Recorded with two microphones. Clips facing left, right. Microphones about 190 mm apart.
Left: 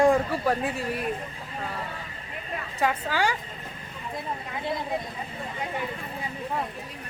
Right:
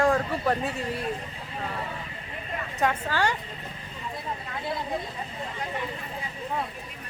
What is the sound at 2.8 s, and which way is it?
Speech, 10° left (ahead or behind).